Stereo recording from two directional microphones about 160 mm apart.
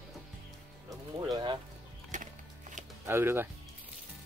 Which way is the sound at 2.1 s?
50° right (ahead or behind).